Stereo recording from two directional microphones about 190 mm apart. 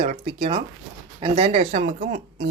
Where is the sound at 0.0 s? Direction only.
45° right (ahead or behind).